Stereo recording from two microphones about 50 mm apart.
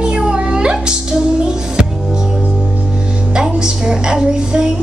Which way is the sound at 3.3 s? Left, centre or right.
Centre.